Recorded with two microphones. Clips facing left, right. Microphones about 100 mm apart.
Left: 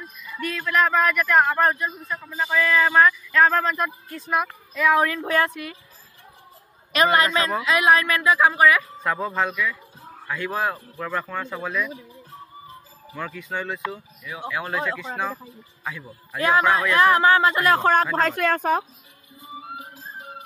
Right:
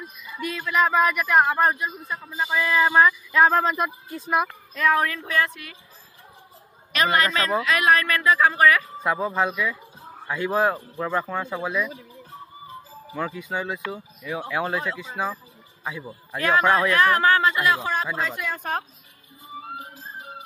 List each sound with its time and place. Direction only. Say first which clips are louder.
0.0 s speech: left 1 dB; 10° right (ahead or behind)
4.7 s speech: left 2 dB; 15° left (ahead or behind)
5.0 s speech: left 3 dB; 30° left (ahead or behind)
6.9 s a woman's voice: left 3 dB; 30° left (ahead or behind)
9.0 s speech: right 1 dB; 10° right (ahead or behind)
13.1 s speech: right 2 dB; 20° right (ahead or behind)
14.5 s speech: right 2 dB; 30° right (ahead or behind)
15.8 s a man's voice: right 1 dB; 15° right (ahead or behind)
16.3 s a woman's voice: left 2 dB; 25° left (ahead or behind)
16.6 s speech: right 1 dB; 30° right (ahead or behind)
16.9 s a woman's voice: left 2 dB; 25° left (ahead or behind)
17.6 s speech: left 5 dB; 50° left (ahead or behind)
18.1 s speech: left 7 dB; 65° left (ahead or behind)